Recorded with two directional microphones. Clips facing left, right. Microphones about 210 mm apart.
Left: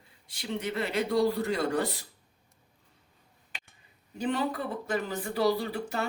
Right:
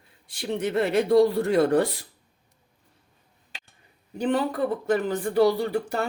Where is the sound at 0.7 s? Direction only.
55° right (ahead or behind).